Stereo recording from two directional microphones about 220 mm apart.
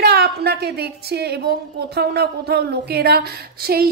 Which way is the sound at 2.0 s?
45° right (ahead or behind).